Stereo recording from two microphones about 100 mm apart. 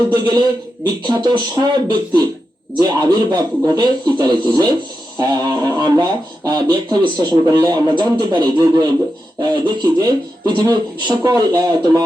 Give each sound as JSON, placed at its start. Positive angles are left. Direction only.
{"t": 0.1, "sound": "speech", "side_deg": -45}